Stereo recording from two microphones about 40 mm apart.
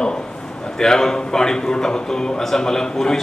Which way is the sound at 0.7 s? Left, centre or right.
Centre.